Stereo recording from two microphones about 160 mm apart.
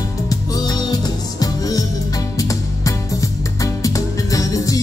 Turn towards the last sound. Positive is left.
turn(degrees=20)  # may be behind; listen again after turning